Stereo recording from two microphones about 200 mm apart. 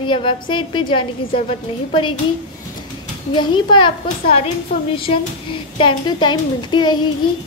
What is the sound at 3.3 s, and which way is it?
Child singing, 25° left (ahead or behind).